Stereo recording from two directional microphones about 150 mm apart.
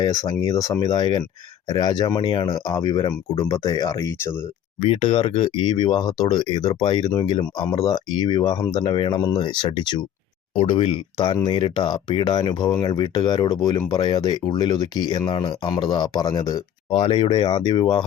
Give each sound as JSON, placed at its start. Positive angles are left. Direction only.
{"t": 0.0, "sound": "speech", "side_deg": 25}
{"t": 4.8, "sound": "speech", "side_deg": 40}
{"t": 10.5, "sound": "speech", "side_deg": 40}
{"t": 16.9, "sound": "speech", "side_deg": 40}